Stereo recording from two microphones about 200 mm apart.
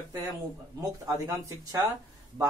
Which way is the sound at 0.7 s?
15° right (ahead or behind).